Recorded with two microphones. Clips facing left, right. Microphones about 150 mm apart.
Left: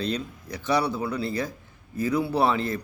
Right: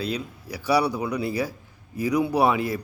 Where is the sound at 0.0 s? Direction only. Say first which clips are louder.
Even; 10° right (ahead or behind).